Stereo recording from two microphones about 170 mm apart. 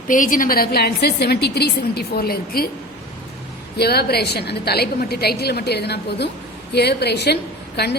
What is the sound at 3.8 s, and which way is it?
A woman's voice, 70° left (ahead or behind).